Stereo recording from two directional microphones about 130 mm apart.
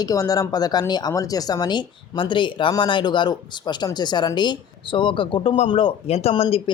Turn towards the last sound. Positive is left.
turn(degrees=50)  # may be behind; listen again after turning